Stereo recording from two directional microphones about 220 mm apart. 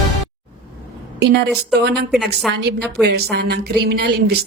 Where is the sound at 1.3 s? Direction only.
50° right (ahead or behind).